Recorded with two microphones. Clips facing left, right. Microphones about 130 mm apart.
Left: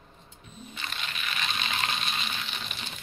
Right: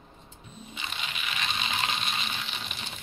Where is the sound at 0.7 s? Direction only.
15° right (ahead or behind).